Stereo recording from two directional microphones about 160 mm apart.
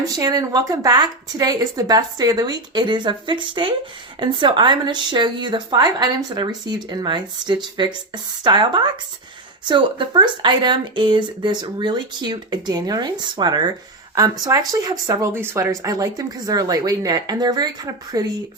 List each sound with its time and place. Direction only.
0.0 s speech: 25° right (ahead or behind)